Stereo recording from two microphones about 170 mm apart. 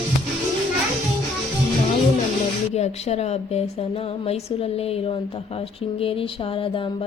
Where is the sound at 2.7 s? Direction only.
40° left (ahead or behind).